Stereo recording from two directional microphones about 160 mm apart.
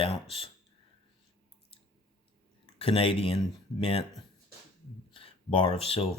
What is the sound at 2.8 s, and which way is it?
Speech, 35° left (ahead or behind).